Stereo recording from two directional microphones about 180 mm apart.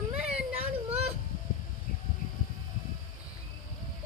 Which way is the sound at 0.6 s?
35° right (ahead or behind).